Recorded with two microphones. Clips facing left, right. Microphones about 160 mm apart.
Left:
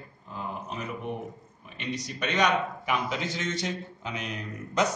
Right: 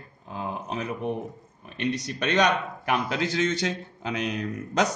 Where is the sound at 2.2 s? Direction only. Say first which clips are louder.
Right 2 dB; 75° right (ahead or behind).